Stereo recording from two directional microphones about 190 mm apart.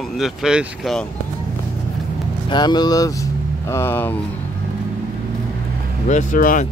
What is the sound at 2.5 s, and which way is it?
Speech, 20° left (ahead or behind).